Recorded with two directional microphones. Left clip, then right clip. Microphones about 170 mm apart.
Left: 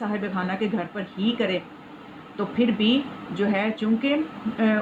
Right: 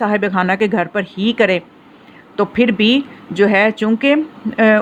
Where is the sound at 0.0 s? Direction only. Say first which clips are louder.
Right 13 dB; 50° right (ahead or behind).